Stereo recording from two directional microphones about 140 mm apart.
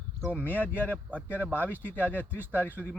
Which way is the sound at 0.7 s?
10° left (ahead or behind).